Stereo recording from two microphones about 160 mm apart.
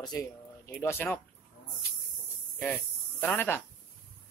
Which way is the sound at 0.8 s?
15° left (ahead or behind).